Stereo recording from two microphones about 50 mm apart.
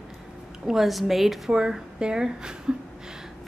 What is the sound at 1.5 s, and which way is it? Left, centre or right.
A woman's voice, centre.